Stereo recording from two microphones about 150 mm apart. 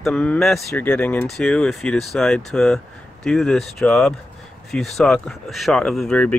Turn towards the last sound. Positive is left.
turn(degrees=5)  # may be behind; listen again after turning